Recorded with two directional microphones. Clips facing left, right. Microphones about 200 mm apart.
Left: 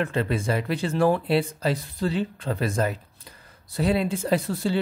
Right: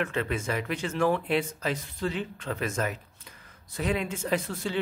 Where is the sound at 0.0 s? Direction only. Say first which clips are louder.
Left 4 dB; 35° left (ahead or behind).